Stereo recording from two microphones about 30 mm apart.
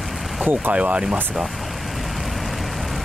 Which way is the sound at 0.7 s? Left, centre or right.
Right.